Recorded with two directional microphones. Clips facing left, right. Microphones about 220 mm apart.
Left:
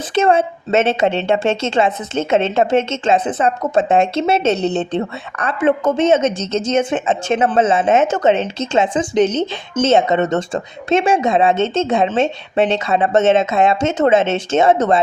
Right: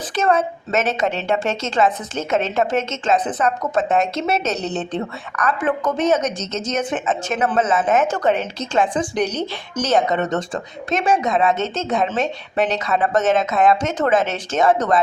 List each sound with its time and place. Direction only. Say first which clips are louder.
0.1 s a woman's voice: left 4 dB; 25° left (ahead or behind)